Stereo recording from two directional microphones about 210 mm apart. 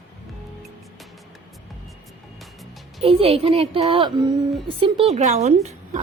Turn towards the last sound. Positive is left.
turn(degrees=-30)  # may be behind; listen again after turning